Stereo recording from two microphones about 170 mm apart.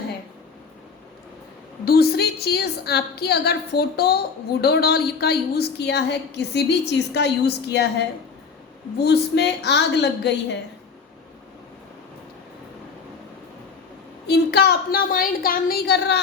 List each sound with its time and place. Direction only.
1.8 s a woman's voice: 65° left (ahead or behind); by 10.6 s 90° left
14.3 s a woman's voice: 70° left (ahead or behind)